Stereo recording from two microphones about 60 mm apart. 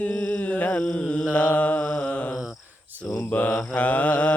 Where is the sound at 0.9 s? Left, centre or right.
Left.